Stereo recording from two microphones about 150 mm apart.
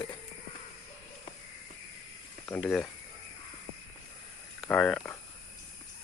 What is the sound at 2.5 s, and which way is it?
Speech, 5° left (ahead or behind).